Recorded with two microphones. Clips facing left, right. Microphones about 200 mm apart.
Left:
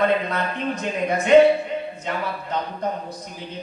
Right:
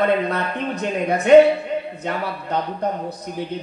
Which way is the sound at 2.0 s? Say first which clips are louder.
Right 2 dB; 60° right (ahead or behind).